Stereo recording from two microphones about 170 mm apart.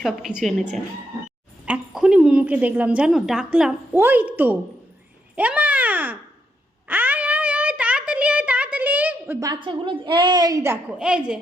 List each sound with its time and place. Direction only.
0.0 s a woman's voice: 5° right (ahead or behind)
5.4 s babbling: 10° right (ahead or behind)
6.8 s a sound: 10° right (ahead or behind)
9.5 s a woman's voice: 30° right (ahead or behind); by 11.3 s 5° right (ahead or behind)